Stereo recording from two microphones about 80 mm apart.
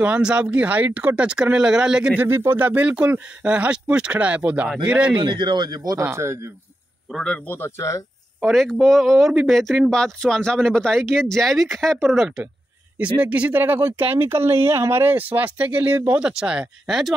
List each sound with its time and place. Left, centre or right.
0.0 s speech: centre
2.2 s a man's voice: right
2.6 s speech: centre
5.1 s speech: right
5.9 s a man's voice: right
7.1 s speech: centre
7.4 s speech: left
8.5 s speech: centre
12.9 s speech: centre